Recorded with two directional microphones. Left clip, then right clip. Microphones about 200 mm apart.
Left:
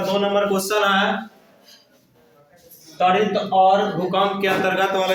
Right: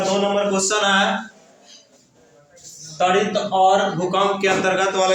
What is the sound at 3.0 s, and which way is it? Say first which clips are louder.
A man's voice: even; centre (ahead or behind).